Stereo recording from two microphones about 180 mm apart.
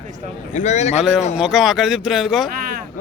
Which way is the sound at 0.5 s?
40° left (ahead or behind).